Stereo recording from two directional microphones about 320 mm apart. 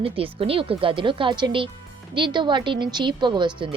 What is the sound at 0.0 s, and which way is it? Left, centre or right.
Speech, centre.